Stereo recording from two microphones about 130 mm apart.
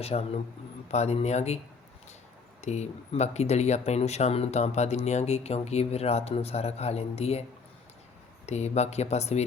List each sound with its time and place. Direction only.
0.0 s speech: 55° left (ahead or behind)
2.6 s speech: 60° left (ahead or behind)
8.4 s speech: 60° left (ahead or behind)